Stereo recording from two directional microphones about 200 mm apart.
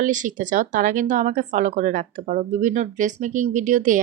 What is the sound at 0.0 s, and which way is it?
Speech, 40° right (ahead or behind).